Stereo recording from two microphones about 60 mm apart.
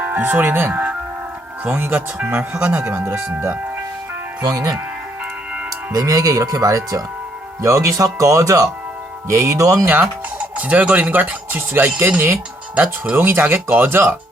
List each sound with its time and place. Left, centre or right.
0.0 s speech: right
2.2 s speech: right
4.4 s speech: right
5.9 s speech: right
7.6 s speech: right
9.8 s speech: right
10.6 s speech: right
13.1 s speech: right